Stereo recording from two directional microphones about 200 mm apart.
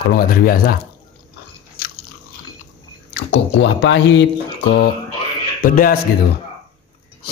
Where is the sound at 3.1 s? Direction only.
65° left (ahead or behind).